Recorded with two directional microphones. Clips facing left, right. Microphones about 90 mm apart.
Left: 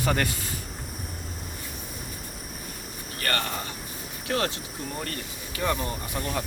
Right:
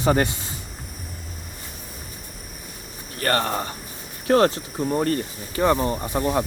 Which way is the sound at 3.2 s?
35° right (ahead or behind).